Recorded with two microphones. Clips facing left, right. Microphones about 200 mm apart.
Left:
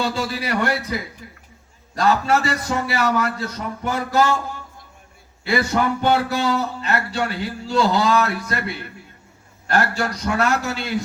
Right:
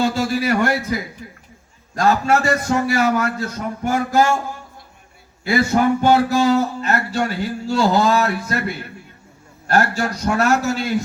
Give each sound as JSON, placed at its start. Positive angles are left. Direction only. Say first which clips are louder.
{"t": 0.0, "sound": "speech", "louder": "right 5 dB", "side_deg": -45}
{"t": 2.0, "sound": "speech", "louder": "right 2 dB", "side_deg": -50}
{"t": 5.5, "sound": "speech", "louder": "right 4 dB", "side_deg": -45}